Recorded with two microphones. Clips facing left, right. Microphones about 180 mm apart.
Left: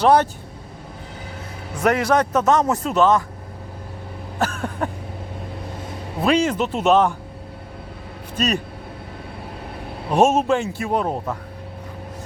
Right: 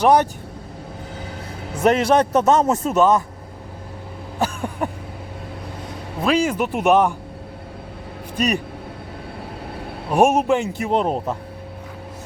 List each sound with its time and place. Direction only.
0.0 s a man's voice: 15° right (ahead or behind)
1.8 s speech: 25° right (ahead or behind)
2.9 s a man's voice: 10° right (ahead or behind)
4.4 s a sound: 15° right (ahead or behind)
6.2 s a man's voice: 5° right (ahead or behind)
8.4 s a man's voice: 15° right (ahead or behind)
10.1 s a man's voice: 15° right (ahead or behind)